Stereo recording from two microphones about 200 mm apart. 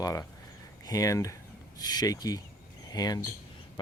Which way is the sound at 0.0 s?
15° left (ahead or behind).